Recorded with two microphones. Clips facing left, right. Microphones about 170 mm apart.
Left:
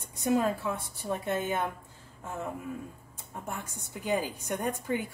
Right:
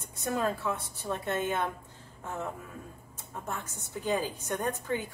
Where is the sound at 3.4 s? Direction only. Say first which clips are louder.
Even; 15° left (ahead or behind).